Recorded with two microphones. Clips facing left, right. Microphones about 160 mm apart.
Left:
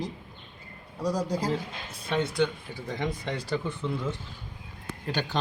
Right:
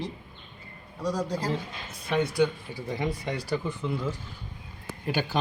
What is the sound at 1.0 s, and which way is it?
Speech, 10° left (ahead or behind).